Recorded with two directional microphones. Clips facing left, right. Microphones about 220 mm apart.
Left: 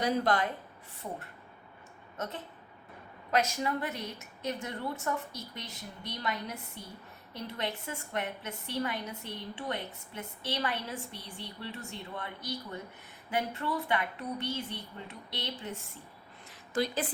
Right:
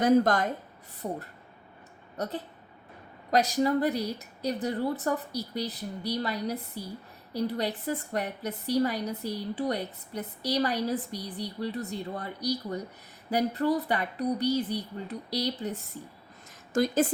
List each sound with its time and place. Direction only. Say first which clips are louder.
0.0 s a woman's voice: right 7 dB; 45° right (ahead or behind)
16.7 s a woman's voice: right 7 dB; 45° right (ahead or behind)